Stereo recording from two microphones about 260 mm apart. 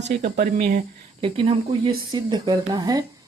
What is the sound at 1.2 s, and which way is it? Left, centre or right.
Speech, centre.